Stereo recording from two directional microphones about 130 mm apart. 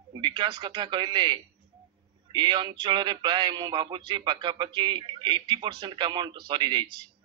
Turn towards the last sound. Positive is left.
turn(degrees=-35)  # may be behind; listen again after turning